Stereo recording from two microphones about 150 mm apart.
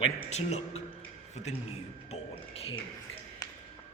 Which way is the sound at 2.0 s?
40° left (ahead or behind).